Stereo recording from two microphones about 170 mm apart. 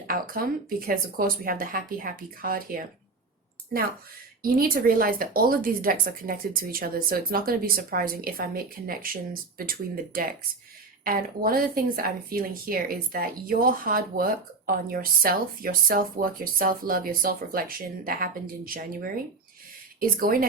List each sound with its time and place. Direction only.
0.1 s speech: 55° right (ahead or behind)
4.4 s speech: 60° right (ahead or behind)